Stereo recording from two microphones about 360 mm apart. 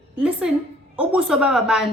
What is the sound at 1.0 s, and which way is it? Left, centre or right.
Speech, centre.